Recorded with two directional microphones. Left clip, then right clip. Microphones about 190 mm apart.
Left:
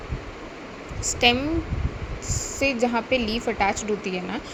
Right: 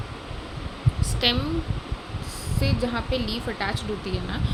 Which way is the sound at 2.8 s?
20° left (ahead or behind).